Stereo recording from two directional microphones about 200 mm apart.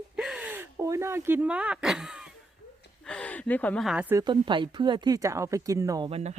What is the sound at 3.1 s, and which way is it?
Speech, 5° left (ahead or behind).